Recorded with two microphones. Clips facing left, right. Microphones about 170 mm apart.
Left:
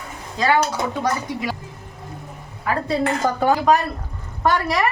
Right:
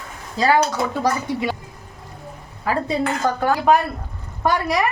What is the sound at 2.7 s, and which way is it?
Speech, 35° right (ahead or behind).